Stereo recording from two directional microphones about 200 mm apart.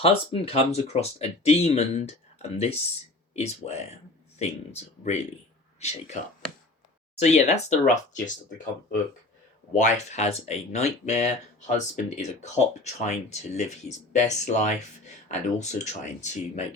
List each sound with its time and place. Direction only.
0.0 s speech: 30° left (ahead or behind)
7.2 s speech: 35° left (ahead or behind)
9.7 s speech: 35° left (ahead or behind)